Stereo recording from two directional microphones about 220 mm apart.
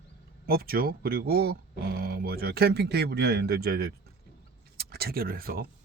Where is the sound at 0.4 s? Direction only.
45° right (ahead or behind).